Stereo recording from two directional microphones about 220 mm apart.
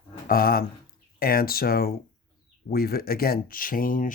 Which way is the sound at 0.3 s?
40° left (ahead or behind).